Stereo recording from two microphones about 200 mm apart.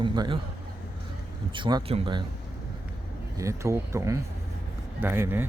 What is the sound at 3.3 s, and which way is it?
Speech, 15° right (ahead or behind).